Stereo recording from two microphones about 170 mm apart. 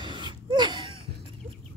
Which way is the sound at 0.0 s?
25° right (ahead or behind).